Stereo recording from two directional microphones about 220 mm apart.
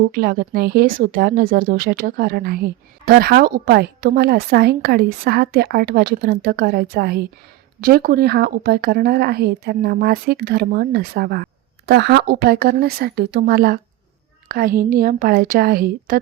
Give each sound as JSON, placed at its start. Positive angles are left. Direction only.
{"t": 0.0, "sound": "a woman's voice", "side_deg": -40}